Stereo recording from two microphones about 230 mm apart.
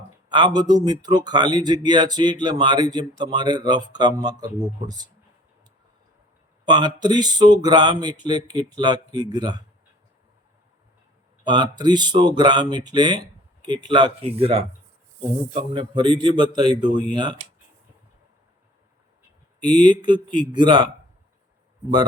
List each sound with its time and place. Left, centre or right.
0.3 s speech: centre
6.7 s speech: centre
11.4 s speech: centre
19.6 s speech: centre